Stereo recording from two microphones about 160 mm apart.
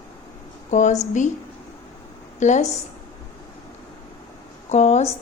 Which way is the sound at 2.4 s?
50° left (ahead or behind).